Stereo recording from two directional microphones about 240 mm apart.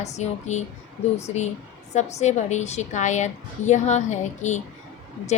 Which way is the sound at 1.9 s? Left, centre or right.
Left.